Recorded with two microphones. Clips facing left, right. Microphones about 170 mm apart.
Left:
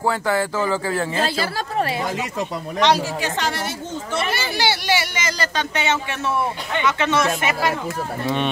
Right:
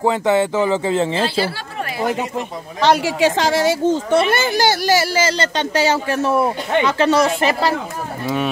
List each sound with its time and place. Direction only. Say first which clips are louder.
0.0 s speech: right 5 dB; 20° right (ahead or behind)
3.0 s a woman's voice: right 7 dB; 90° right
4.1 s speech: right 8 dB; 50° right (ahead or behind); by 7.7 s 35° right (ahead or behind)